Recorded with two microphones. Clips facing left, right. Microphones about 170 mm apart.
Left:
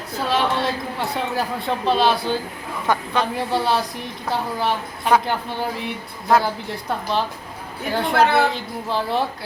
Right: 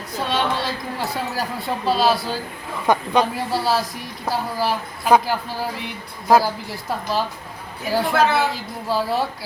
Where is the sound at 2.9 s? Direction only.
20° right (ahead or behind).